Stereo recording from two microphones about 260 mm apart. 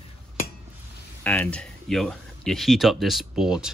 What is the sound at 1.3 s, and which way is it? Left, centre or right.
Speech, centre.